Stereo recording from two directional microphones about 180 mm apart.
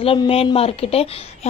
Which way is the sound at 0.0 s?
30° left (ahead or behind).